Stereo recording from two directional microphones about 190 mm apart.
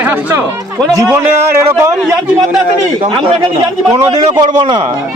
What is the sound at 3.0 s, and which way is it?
A man's voice, 25° right (ahead or behind).